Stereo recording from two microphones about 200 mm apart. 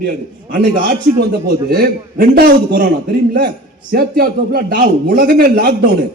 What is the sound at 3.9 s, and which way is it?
A man's voice, 50° right (ahead or behind).